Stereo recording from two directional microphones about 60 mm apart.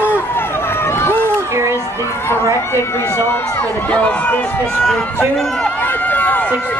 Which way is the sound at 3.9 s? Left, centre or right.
Centre.